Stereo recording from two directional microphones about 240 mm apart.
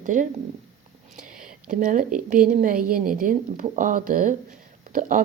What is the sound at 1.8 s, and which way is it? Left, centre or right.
A woman's voice, right.